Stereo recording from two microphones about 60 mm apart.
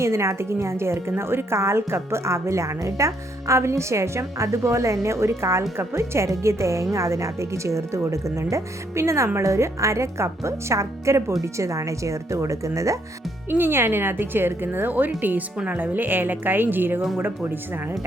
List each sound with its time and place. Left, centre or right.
0.0 s a woman's voice: right
13.5 s speech: right